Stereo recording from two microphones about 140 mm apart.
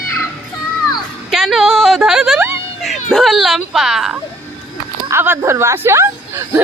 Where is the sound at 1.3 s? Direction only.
Centre (ahead or behind).